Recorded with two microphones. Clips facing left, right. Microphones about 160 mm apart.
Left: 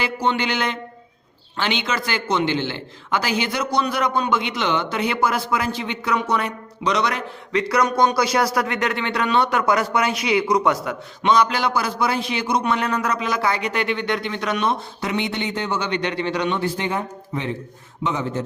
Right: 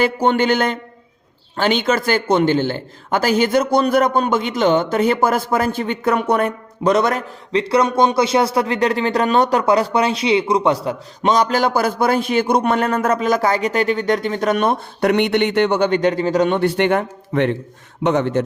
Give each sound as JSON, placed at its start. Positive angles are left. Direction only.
{"t": 0.0, "sound": "a man's voice", "side_deg": -50}
{"t": 7.5, "sound": "speech", "side_deg": -30}
{"t": 16.6, "sound": "a man's voice", "side_deg": -70}